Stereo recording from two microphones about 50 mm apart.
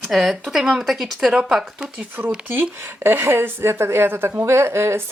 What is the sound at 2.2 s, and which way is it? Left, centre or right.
Speech, right.